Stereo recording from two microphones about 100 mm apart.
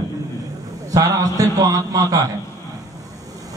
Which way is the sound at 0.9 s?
35° right (ahead or behind).